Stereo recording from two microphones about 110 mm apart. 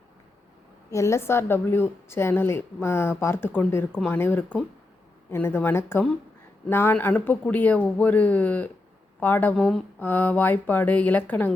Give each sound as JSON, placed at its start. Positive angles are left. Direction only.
{"t": 0.9, "sound": "a woman's voice", "side_deg": 25}
{"t": 9.6, "sound": "speech", "side_deg": 5}
{"t": 10.0, "sound": "speech", "side_deg": 15}